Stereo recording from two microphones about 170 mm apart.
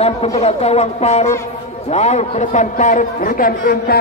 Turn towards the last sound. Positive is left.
turn(degrees=60)  # may be behind; listen again after turning